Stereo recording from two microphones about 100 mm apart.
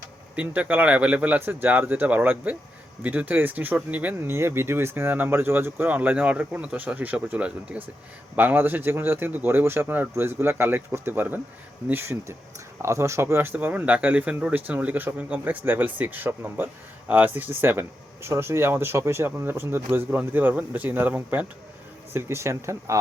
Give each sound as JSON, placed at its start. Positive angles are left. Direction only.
{"t": 0.3, "sound": "speech", "side_deg": -15}